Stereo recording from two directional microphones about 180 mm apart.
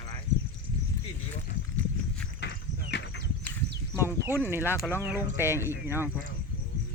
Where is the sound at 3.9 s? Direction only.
15° right (ahead or behind).